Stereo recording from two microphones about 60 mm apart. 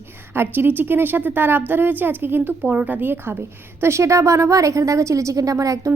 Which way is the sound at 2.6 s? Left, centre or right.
Right.